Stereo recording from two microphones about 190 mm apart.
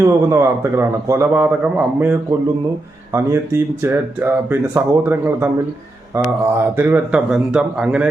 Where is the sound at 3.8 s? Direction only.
15° right (ahead or behind).